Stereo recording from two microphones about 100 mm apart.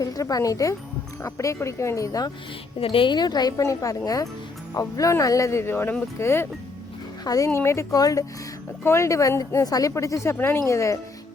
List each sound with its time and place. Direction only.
0.0 s a woman's voice: 40° left (ahead or behind)
2.8 s a woman's voice: 60° left (ahead or behind); by 3.5 s 45° left (ahead or behind)
3.6 s a woman's voice: 30° left (ahead or behind)